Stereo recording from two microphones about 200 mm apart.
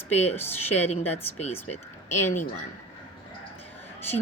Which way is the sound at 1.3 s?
35° left (ahead or behind).